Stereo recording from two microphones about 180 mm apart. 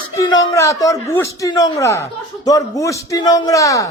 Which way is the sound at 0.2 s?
20° left (ahead or behind).